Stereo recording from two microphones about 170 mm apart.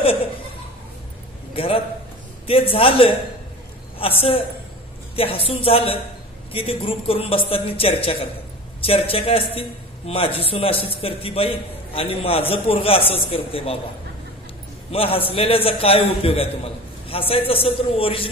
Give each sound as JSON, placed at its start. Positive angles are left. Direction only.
{"t": 0.0, "sound": "laughter", "side_deg": 35}
{"t": 1.5, "sound": "a man's voice", "side_deg": 35}
{"t": 14.9, "sound": "a man's voice", "side_deg": 35}